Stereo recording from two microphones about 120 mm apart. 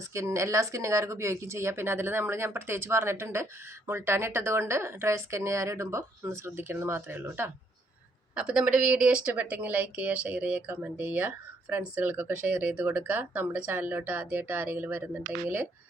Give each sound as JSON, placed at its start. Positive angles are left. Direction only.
{"t": 0.0, "sound": "speech", "side_deg": -25}
{"t": 8.4, "sound": "speech", "side_deg": -5}